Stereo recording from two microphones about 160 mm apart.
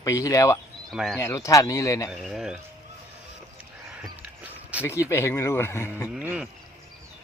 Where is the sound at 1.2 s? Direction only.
20° left (ahead or behind).